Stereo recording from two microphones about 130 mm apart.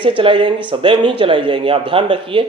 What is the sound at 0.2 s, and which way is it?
Speech, 40° right (ahead or behind).